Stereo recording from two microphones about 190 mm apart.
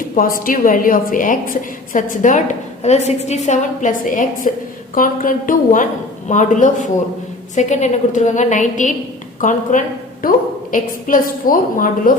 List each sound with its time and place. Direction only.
0.2 s a woman's voice: 50° left (ahead or behind)